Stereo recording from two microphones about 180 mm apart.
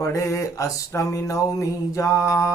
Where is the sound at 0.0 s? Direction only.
15° left (ahead or behind).